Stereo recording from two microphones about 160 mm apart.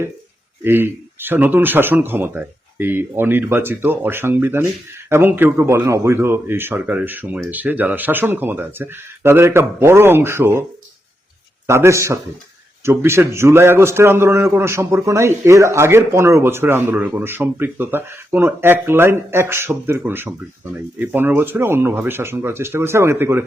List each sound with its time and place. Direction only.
0.6 s speech: 15° right (ahead or behind)
11.7 s speech: 15° right (ahead or behind)